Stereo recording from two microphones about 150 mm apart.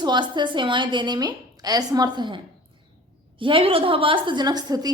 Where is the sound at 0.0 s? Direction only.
30° right (ahead or behind).